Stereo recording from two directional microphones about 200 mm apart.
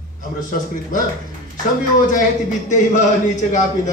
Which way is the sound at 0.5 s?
40° left (ahead or behind).